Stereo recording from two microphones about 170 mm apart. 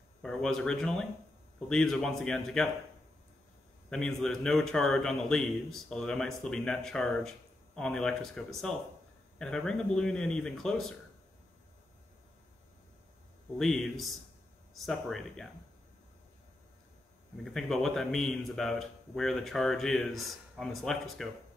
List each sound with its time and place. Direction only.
0.2 s speech: 5° left (ahead or behind)
3.9 s speech: 5° left (ahead or behind)
13.6 s speech: centre (ahead or behind)
17.5 s speech: centre (ahead or behind)